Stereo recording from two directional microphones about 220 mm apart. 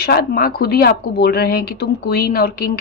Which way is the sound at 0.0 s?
45° left (ahead or behind).